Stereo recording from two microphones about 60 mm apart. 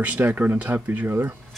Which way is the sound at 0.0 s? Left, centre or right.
Right.